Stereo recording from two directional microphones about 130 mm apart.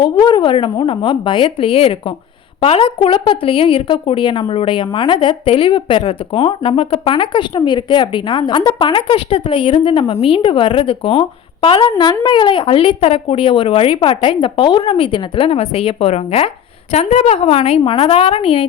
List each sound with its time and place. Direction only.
0.0 s a woman's voice: 35° left (ahead or behind)